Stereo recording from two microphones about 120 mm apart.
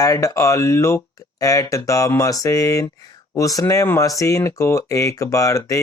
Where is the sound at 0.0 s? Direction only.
30° left (ahead or behind).